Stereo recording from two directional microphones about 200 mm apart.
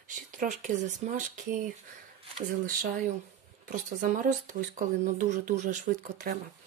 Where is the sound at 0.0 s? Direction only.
40° right (ahead or behind).